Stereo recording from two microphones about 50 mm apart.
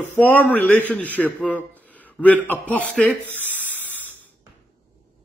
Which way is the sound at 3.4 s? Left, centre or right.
Left.